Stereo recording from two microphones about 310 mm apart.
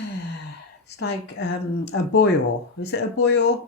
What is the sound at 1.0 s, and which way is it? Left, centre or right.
Speech, left.